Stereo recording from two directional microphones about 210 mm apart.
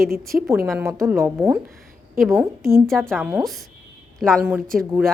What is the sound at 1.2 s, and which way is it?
Speech, 10° right (ahead or behind).